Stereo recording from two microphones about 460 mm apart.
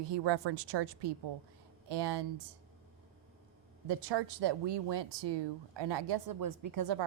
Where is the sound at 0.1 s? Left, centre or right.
Right.